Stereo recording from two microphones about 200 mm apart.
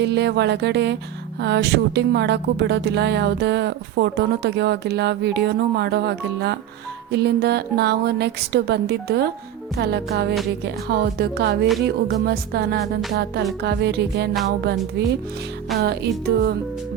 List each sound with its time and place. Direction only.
0.0 s speech: 60° right (ahead or behind)
10.8 s music: 55° right (ahead or behind)
13.6 s speech: 55° right (ahead or behind)
15.8 s music: 55° right (ahead or behind)